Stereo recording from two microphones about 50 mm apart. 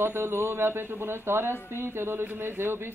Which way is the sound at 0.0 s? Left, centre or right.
Right.